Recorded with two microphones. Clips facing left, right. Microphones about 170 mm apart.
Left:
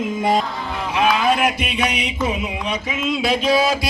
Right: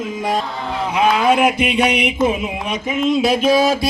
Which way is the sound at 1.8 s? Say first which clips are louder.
Right 3 dB; 60° right (ahead or behind).